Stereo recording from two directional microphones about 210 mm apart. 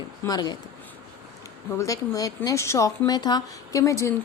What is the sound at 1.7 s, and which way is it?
A woman's voice, 15° left (ahead or behind).